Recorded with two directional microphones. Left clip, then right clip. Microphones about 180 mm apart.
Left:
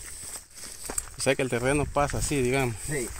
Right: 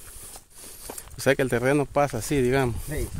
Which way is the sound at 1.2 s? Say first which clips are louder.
Right 4 dB; 55° right (ahead or behind).